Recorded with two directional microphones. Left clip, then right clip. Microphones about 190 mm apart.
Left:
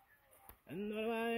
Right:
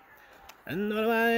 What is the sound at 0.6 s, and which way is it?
Speech, 10° right (ahead or behind).